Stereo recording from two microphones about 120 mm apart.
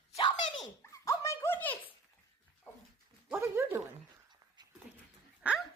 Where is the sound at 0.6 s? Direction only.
25° left (ahead or behind).